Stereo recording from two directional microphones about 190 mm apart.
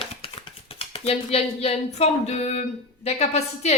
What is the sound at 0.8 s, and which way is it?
Speech, 30° left (ahead or behind).